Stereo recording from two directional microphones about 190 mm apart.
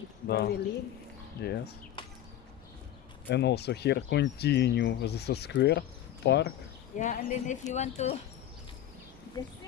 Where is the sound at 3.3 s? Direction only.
60° left (ahead or behind).